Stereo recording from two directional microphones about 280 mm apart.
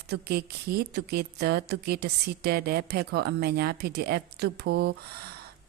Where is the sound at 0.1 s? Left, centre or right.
Right.